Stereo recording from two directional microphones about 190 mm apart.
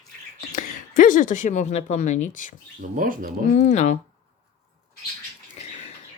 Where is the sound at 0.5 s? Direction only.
45° left (ahead or behind).